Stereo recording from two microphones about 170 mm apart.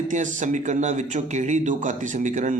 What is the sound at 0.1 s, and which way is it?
A man's voice, 45° right (ahead or behind).